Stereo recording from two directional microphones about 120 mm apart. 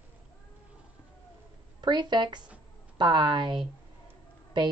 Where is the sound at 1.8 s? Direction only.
40° right (ahead or behind).